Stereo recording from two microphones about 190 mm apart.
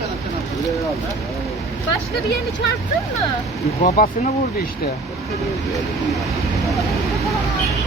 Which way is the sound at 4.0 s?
50° left (ahead or behind).